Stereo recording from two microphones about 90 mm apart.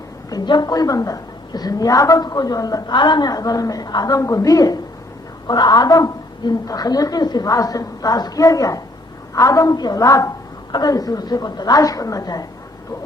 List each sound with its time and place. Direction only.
0.3 s a woman's voice: 50° left (ahead or behind)
10.7 s a woman's voice: 50° left (ahead or behind)